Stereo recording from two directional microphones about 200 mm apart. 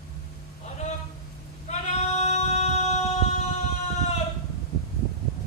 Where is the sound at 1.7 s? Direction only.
35° left (ahead or behind).